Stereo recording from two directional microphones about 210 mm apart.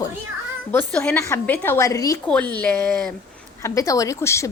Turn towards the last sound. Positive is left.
turn(degrees=15)  # may be behind; listen again after turning